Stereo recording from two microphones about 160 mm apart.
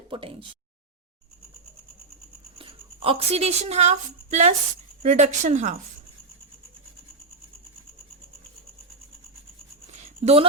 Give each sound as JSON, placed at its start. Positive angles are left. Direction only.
{"t": 0.1, "sound": "speech", "side_deg": -35}
{"t": 2.6, "sound": "a woman's voice", "side_deg": -35}
{"t": 9.9, "sound": "a sound", "side_deg": -40}